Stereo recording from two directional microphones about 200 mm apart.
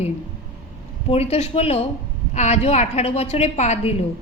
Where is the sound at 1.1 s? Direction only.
30° left (ahead or behind).